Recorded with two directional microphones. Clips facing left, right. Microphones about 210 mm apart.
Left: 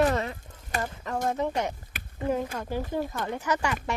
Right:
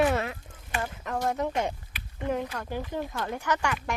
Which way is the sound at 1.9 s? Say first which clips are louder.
Left 2 dB; 45° left (ahead or behind).